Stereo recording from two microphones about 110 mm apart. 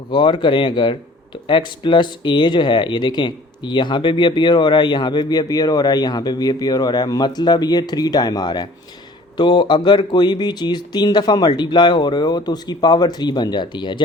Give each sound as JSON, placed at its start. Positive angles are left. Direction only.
{"t": 0.1, "sound": "speech", "side_deg": 45}